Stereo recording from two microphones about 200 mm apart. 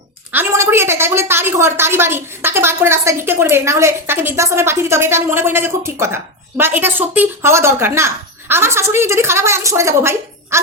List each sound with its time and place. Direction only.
0.3 s a woman's voice: 10° right (ahead or behind)